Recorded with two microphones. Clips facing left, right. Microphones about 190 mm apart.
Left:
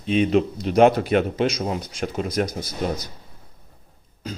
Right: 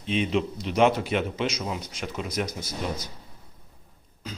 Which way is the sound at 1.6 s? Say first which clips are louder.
Left 6 dB; 40° left (ahead or behind).